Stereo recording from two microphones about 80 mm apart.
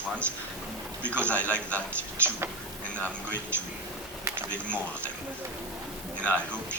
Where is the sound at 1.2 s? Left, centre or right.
Centre.